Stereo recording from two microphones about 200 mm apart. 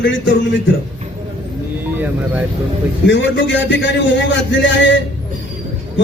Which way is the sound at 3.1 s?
65° left (ahead or behind).